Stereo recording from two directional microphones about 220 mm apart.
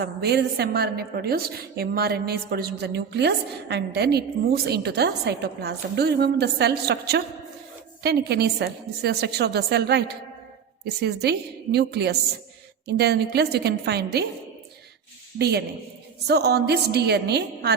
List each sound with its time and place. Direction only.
0.0 s a woman's voice: 45° right (ahead or behind)
15.4 s a woman's voice: 45° right (ahead or behind)